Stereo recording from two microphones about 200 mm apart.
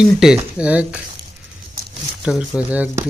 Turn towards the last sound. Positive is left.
turn(degrees=-10)  # may be behind; listen again after turning